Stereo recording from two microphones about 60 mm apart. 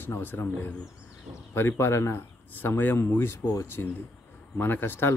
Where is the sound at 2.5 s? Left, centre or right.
Left.